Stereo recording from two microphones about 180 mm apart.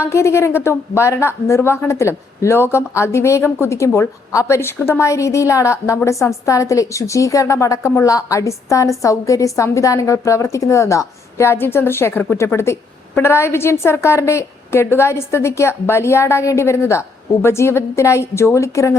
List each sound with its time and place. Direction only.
0.0 s a woman's voice: 15° left (ahead or behind)